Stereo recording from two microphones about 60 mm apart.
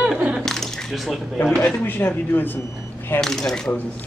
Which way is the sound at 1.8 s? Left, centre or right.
Left.